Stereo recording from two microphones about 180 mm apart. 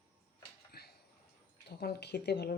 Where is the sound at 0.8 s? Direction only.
60° left (ahead or behind).